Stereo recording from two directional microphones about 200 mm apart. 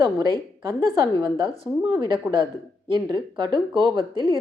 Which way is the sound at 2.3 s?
15° right (ahead or behind).